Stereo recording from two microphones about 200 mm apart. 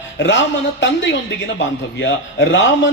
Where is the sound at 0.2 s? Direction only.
65° left (ahead or behind).